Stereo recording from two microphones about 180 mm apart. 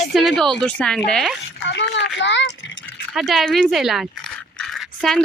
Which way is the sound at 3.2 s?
Centre (ahead or behind).